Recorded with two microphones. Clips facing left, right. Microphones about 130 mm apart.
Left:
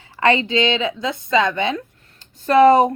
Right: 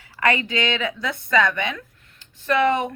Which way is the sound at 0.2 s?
25° left (ahead or behind).